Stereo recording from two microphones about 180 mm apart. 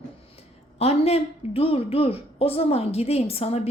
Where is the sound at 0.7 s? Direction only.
35° left (ahead or behind).